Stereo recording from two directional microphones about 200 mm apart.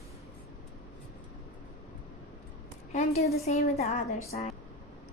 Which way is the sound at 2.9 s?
35° left (ahead or behind).